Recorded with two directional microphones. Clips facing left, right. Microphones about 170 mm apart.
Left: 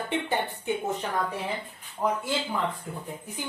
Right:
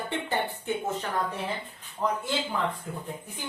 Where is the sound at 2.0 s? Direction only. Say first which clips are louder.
Left 1 dB; 10° left (ahead or behind).